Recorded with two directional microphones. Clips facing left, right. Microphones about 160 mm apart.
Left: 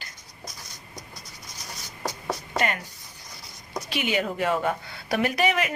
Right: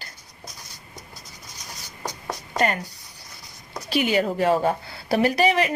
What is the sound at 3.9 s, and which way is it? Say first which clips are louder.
Speech: right 6 dB; 35° right (ahead or behind).